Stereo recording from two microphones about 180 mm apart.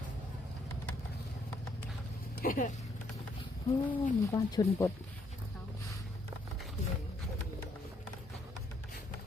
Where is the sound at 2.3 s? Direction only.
50° left (ahead or behind).